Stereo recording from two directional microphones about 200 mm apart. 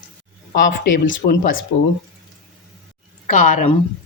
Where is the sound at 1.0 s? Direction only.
70° left (ahead or behind).